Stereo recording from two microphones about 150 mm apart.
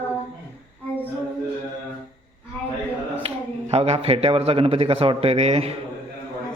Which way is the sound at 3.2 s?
45° right (ahead or behind).